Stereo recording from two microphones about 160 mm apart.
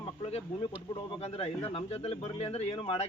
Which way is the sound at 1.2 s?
40° left (ahead or behind).